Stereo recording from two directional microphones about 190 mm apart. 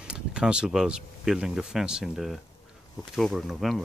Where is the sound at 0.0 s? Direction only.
5° right (ahead or behind).